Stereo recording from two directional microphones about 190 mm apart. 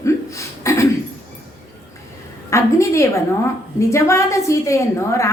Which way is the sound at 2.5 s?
15° left (ahead or behind).